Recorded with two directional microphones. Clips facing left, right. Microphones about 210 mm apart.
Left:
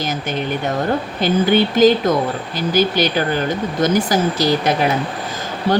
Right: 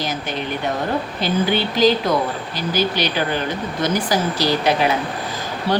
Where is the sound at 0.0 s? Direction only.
50° left (ahead or behind).